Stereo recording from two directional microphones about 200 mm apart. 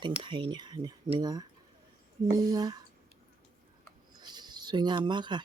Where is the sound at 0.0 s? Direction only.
25° right (ahead or behind).